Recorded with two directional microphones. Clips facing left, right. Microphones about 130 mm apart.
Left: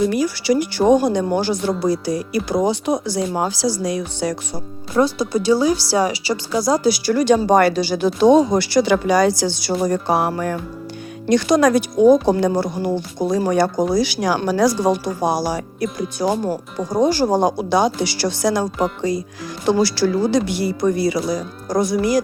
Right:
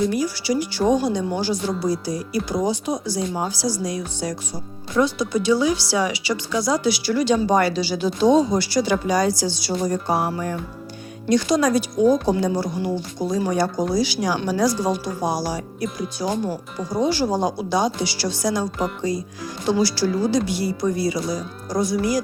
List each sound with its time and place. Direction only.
0.1 s speech: 65° left (ahead or behind)
4.9 s speech: 35° left (ahead or behind); by 10.6 s 75° left (ahead or behind)
11.3 s speech: 60° left (ahead or behind)